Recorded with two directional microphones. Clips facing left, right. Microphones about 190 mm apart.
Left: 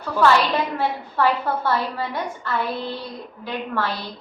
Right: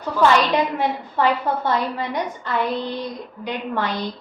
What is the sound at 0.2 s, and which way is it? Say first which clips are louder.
A woman's voice: right 1 dB; 15° right (ahead or behind).